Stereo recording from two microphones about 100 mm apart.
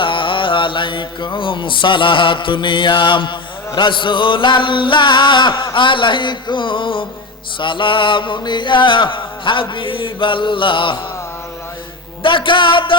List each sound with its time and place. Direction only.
0.0 s mantra: 55° left (ahead or behind)
3.8 s music: 55° left (ahead or behind)
7.6 s chant: 55° left (ahead or behind)
12.2 s chant: 55° left (ahead or behind)